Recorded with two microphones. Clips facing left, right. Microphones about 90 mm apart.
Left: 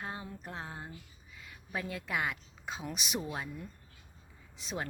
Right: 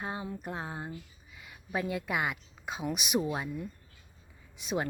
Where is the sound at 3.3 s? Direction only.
15° right (ahead or behind).